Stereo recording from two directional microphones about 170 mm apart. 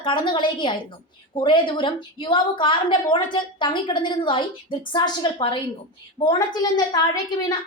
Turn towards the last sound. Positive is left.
turn(degrees=25)  # may be behind; listen again after turning